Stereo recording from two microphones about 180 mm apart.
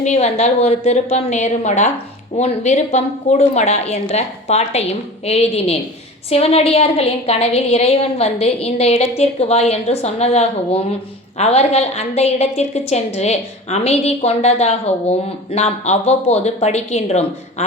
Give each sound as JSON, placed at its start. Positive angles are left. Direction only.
{"t": 0.0, "sound": "a woman's voice", "side_deg": 40}